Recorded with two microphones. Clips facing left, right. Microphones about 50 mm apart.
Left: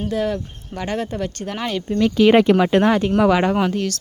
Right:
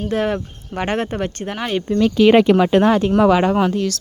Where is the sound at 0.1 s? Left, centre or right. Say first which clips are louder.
Right 4 dB; right.